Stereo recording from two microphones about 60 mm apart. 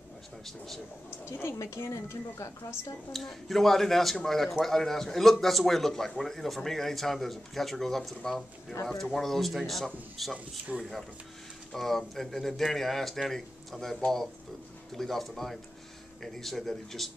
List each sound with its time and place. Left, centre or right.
1.6 s speech: left
3.1 s speech: centre